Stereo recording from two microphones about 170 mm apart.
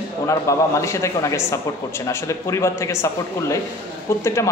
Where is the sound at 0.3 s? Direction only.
15° left (ahead or behind).